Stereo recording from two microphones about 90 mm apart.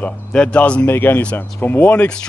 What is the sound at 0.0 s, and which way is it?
Speech, 10° left (ahead or behind).